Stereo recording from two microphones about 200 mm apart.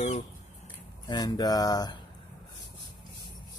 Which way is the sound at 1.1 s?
20° left (ahead or behind).